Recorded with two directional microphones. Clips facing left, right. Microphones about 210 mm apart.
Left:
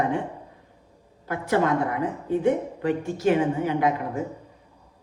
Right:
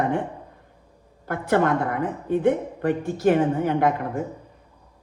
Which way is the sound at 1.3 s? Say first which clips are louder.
Right 2 dB; 55° right (ahead or behind).